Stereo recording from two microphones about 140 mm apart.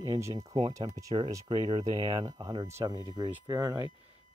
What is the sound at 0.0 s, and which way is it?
Speech, 25° right (ahead or behind).